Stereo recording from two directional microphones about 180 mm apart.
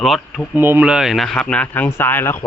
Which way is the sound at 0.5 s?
10° right (ahead or behind).